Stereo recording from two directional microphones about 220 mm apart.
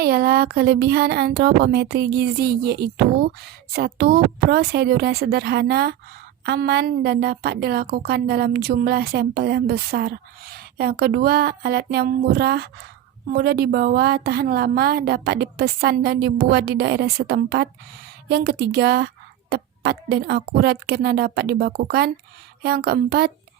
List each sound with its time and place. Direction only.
0.0 s a woman's voice: 45° right (ahead or behind)